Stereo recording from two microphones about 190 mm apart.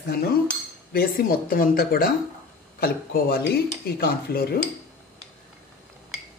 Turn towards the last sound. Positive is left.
turn(degrees=55)  # may be behind; listen again after turning